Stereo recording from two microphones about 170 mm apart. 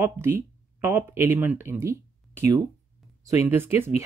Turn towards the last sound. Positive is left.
turn(degrees=-15)  # may be behind; listen again after turning